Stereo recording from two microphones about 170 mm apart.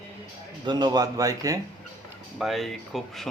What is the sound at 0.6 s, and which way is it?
Speech, 25° right (ahead or behind).